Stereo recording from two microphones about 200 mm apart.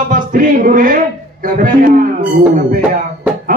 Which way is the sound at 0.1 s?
45° right (ahead or behind).